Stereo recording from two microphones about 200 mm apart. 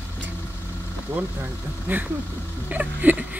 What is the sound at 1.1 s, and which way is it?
Speech, 10° right (ahead or behind).